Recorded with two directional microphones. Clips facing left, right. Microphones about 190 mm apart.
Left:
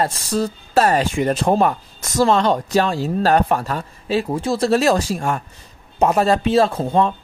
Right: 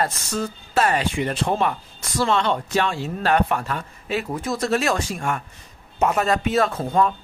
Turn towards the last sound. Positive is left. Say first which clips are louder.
# left 3 dB
turn(degrees=30)  # may be behind; listen again after turning